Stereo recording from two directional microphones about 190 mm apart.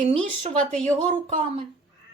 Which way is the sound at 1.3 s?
35° right (ahead or behind).